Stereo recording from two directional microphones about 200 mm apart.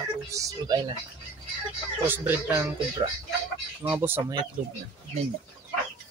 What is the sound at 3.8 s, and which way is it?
Speech, 10° right (ahead or behind).